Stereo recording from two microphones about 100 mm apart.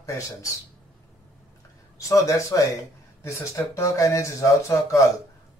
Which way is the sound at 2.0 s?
30° left (ahead or behind).